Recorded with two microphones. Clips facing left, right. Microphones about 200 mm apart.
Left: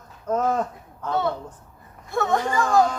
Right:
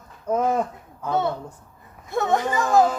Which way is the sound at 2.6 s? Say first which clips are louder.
Right 1 dB; 5° right (ahead or behind).